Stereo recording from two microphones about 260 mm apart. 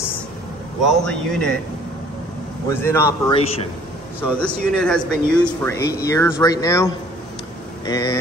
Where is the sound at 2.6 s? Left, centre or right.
Centre.